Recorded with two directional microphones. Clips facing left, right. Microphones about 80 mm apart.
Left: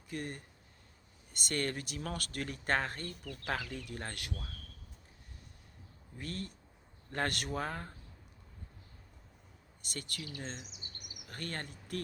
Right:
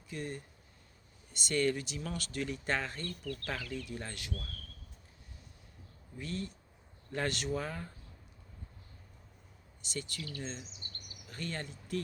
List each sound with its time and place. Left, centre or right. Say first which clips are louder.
0.1 s speech: even; left
3.1 s speech: right 3 dB; centre
3.8 s speech: even; left
6.1 s speech: right 2 dB; left
9.8 s speech: right 2 dB; left
10.7 s a sound: right 1 dB; centre
11.3 s speech: right 1 dB; left